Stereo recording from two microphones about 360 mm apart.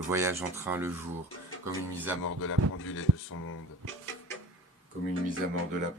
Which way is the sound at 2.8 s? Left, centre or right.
Left.